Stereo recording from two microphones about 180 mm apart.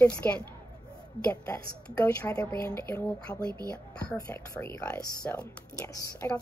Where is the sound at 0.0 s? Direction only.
5° left (ahead or behind).